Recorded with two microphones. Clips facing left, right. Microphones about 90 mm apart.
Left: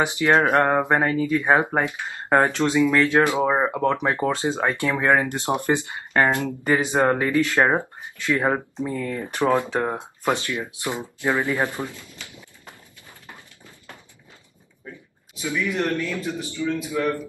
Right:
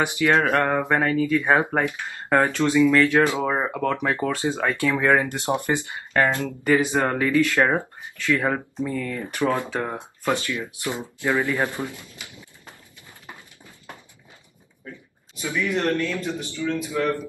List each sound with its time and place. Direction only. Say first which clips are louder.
0.0 s speech: left 1 dB; 20° left (ahead or behind)
11.8 s speech: even; 20° right (ahead or behind)
16.0 s a man's voice: right 1 dB; 5° left (ahead or behind)